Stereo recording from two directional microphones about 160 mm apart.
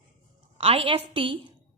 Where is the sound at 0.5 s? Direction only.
35° right (ahead or behind).